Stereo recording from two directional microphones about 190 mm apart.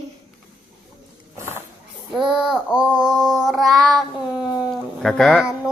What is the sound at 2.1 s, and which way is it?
Child singing, 5° right (ahead or behind).